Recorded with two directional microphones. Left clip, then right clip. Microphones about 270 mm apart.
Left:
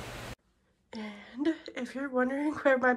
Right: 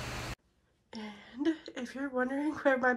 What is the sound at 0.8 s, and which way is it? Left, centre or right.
A woman's voice, centre.